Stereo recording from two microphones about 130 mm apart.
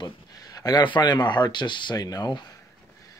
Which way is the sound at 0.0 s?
30° left (ahead or behind).